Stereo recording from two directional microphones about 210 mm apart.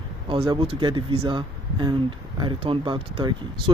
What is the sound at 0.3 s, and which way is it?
Speech, 25° right (ahead or behind).